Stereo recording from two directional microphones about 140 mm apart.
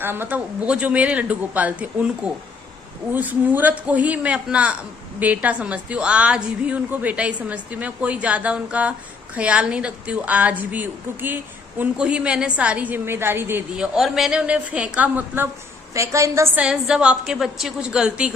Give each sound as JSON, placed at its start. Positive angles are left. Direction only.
{"t": 0.0, "sound": "a woman's voice", "side_deg": -15}
{"t": 16.6, "sound": "a woman's voice", "side_deg": -5}